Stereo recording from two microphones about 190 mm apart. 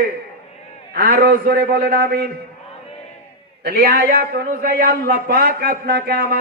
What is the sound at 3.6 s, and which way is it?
A man's voice, 55° right (ahead or behind).